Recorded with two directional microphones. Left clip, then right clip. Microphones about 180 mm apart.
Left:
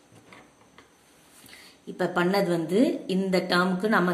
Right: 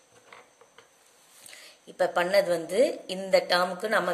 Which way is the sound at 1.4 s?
25° right (ahead or behind).